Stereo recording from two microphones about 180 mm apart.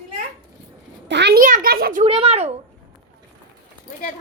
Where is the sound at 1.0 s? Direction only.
75° right (ahead or behind).